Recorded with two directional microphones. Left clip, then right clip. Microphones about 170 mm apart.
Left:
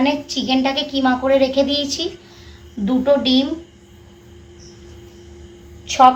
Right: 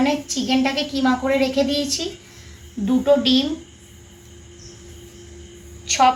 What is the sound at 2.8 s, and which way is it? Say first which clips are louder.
Speech: left 1 dB; 25° left (ahead or behind).